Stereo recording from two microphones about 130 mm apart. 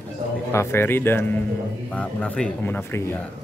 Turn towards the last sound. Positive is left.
turn(degrees=20)  # may be behind; listen again after turning